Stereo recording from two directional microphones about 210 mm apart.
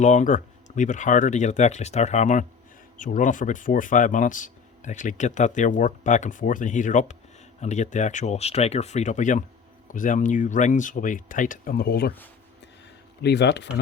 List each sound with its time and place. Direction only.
0.0 s speech: 35° left (ahead or behind)
13.2 s speech: 55° left (ahead or behind)